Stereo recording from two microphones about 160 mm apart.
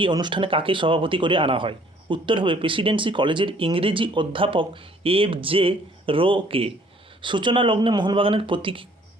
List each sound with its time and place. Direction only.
0.0 s speech: 30° right (ahead or behind)